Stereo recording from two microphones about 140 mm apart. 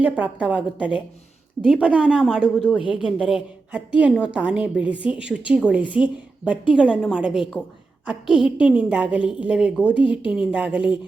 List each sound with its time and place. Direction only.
0.0 s a woman's voice: 10° right (ahead or behind)
10.0 s speech: 35° left (ahead or behind)
10.3 s a woman's voice: 10° right (ahead or behind)